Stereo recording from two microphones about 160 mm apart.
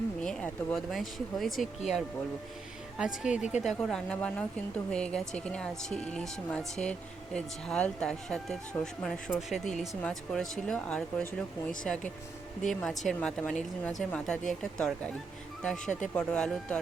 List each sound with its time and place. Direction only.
0.2 s speech: 5° left (ahead or behind)
3.2 s speech: 5° right (ahead or behind)
16.1 s speech: 5° left (ahead or behind)